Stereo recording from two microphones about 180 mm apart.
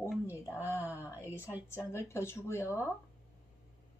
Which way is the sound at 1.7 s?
15° left (ahead or behind).